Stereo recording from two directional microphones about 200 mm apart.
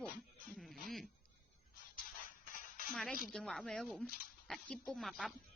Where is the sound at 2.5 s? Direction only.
45° left (ahead or behind).